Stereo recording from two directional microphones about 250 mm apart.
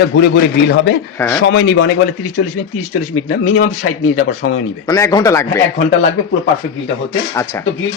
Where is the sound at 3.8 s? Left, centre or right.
Left.